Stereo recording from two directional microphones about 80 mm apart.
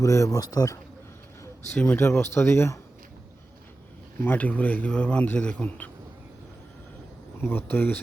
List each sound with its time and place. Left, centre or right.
0.0 s a man's voice: left
1.7 s a man's voice: centre
2.0 s speech: left
4.2 s a man's voice: left
7.4 s speech: left